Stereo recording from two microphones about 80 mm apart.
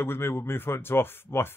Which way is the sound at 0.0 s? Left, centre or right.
Left.